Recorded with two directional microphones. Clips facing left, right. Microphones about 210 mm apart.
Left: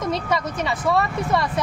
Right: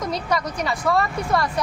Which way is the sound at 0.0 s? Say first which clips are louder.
Left 1 dB; centre (ahead or behind).